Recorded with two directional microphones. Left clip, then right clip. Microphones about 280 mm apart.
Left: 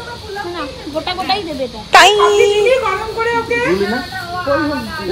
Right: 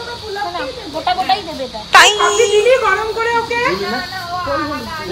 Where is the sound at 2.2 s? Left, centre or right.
Right.